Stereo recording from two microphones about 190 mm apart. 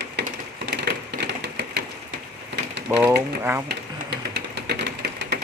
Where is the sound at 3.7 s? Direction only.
60° right (ahead or behind).